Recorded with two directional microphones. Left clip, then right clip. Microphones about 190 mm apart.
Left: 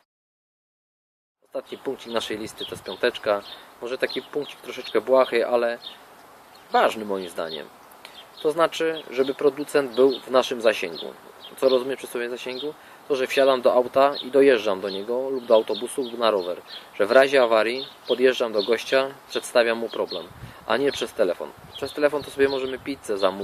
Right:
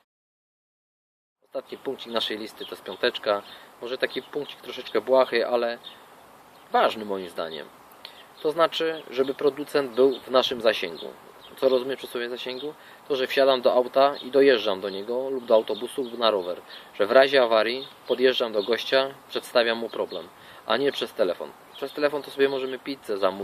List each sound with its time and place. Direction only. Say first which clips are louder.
1.5 s speech: left 2 dB; centre (ahead or behind)